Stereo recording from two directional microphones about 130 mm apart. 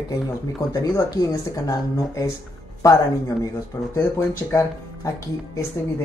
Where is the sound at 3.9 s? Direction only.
25° left (ahead or behind).